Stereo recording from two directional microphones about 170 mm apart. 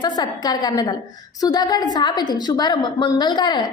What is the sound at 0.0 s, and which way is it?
A woman's voice, 25° left (ahead or behind).